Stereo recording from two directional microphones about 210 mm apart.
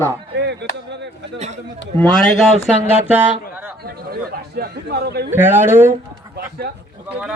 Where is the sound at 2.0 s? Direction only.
5° left (ahead or behind).